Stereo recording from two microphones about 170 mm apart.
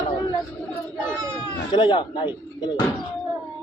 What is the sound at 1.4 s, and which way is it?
Speech, 30° left (ahead or behind).